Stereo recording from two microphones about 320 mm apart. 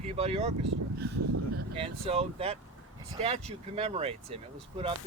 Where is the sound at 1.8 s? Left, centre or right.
Centre.